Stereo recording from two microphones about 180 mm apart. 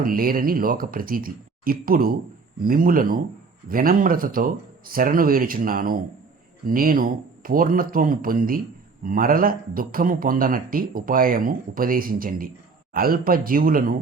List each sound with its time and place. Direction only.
0.0 s speech: 55° right (ahead or behind)